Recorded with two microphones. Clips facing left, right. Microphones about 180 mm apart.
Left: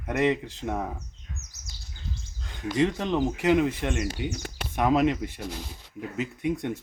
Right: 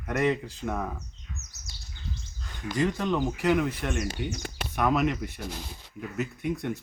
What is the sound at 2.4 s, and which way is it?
Speech, 20° left (ahead or behind).